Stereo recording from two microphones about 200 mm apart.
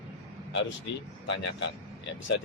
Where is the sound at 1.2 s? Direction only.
60° left (ahead or behind).